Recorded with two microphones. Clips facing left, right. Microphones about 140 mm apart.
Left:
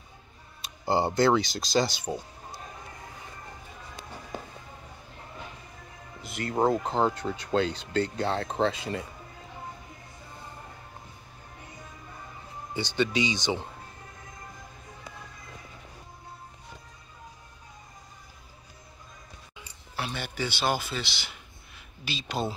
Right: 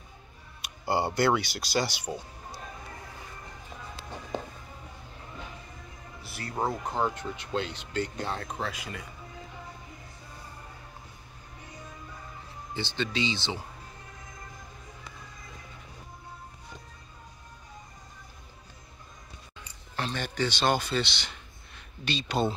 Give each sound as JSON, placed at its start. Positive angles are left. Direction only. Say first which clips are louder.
{"t": 0.8, "sound": "speech", "louder": "left 2 dB", "side_deg": 25}
{"t": 6.2, "sound": "speech", "louder": "left 6 dB", "side_deg": 20}
{"t": 7.3, "sound": "speech", "louder": "left 6 dB", "side_deg": 35}
{"t": 12.7, "sound": "speech", "louder": "left 4 dB", "side_deg": 15}
{"t": 20.0, "sound": "speech", "louder": "right 2 dB", "side_deg": 10}